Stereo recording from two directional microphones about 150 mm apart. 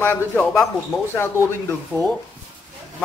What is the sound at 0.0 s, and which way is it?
Speech, 15° left (ahead or behind).